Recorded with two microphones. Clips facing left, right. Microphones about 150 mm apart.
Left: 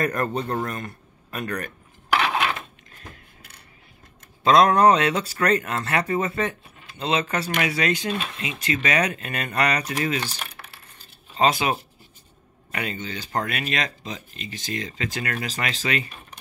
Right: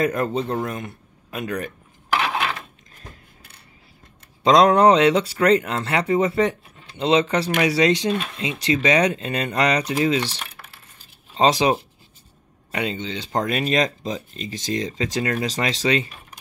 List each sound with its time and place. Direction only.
0.1 s speech: 15° right (ahead or behind)
4.5 s speech: 25° right (ahead or behind)
11.3 s speech: 30° right (ahead or behind)